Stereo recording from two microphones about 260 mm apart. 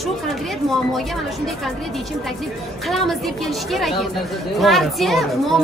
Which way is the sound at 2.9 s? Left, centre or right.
Centre.